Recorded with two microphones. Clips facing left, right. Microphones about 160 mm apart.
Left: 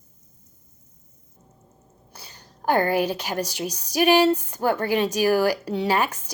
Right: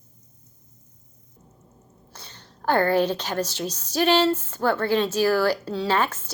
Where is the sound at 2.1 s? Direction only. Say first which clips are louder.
Even; 10° left (ahead or behind).